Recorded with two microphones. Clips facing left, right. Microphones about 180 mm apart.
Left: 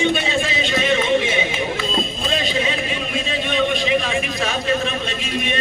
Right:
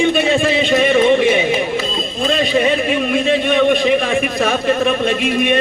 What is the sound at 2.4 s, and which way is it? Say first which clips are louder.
A man's voice: right 8 dB; 60° right (ahead or behind).